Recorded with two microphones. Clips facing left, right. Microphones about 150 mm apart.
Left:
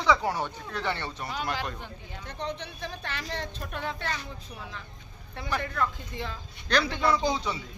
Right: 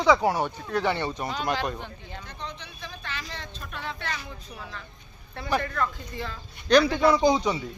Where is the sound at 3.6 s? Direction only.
45° left (ahead or behind).